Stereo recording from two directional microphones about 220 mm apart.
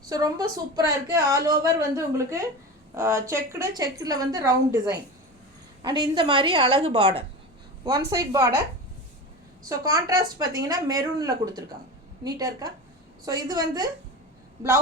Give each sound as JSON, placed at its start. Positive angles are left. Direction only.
{"t": 0.1, "sound": "a woman's voice", "side_deg": -15}
{"t": 8.1, "sound": "a woman's voice", "side_deg": -15}
{"t": 9.6, "sound": "a woman's voice", "side_deg": -15}